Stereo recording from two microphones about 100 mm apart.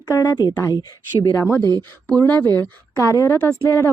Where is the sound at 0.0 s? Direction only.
35° left (ahead or behind).